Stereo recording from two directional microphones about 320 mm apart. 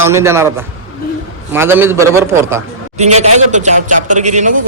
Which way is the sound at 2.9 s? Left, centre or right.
Right.